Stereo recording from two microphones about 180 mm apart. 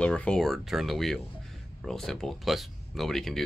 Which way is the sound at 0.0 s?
5° left (ahead or behind).